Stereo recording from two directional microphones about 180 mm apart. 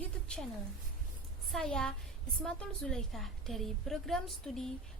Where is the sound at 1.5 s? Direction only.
5° left (ahead or behind).